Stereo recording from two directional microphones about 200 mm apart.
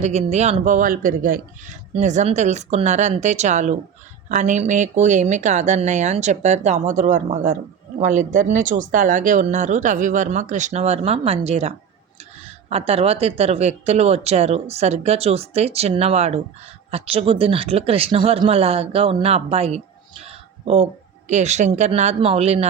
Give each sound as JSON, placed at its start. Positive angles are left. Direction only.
{"t": 0.0, "sound": "speech", "side_deg": -35}
{"t": 20.2, "sound": "a sound", "side_deg": -30}
{"t": 21.2, "sound": "speech", "side_deg": -35}